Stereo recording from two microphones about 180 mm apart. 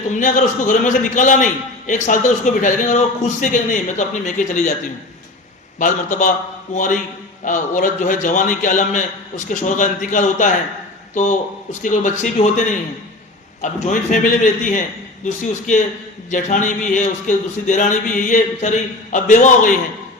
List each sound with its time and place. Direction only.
0.1 s speech: 45° left (ahead or behind)
5.8 s speech: 45° left (ahead or behind)
13.8 s speech: 45° left (ahead or behind)
16.3 s speech: 45° left (ahead or behind)